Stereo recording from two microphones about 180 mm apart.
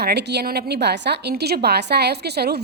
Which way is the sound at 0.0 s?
65° right (ahead or behind).